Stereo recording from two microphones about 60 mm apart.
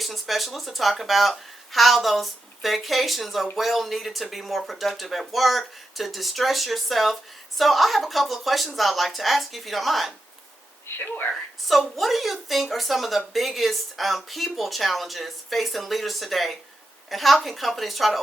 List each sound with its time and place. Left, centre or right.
0.0 s a woman's voice: centre
10.8 s speech: left
11.7 s a woman's voice: centre